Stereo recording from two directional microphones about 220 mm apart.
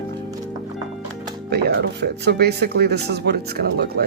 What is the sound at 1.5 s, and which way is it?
Speech, 45° right (ahead or behind).